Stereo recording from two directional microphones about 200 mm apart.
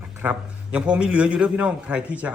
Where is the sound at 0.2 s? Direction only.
5° right (ahead or behind).